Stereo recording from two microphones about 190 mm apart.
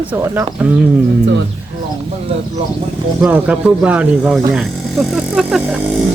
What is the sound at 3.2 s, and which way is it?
Speech, 5° right (ahead or behind).